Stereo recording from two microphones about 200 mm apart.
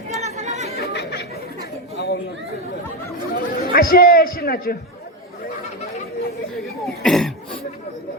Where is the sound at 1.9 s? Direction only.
55° left (ahead or behind).